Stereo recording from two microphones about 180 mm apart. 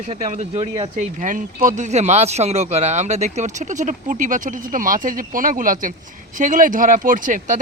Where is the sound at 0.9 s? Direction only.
45° right (ahead or behind).